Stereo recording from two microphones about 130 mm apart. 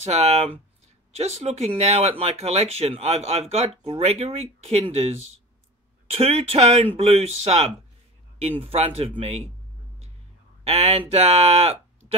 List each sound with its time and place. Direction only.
0.0 s speech: 55° right (ahead or behind)
10.6 s speech: 50° right (ahead or behind)